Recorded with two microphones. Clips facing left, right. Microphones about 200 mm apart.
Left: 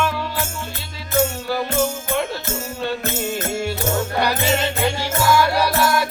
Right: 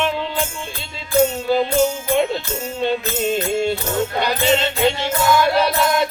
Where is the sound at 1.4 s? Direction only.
20° right (ahead or behind).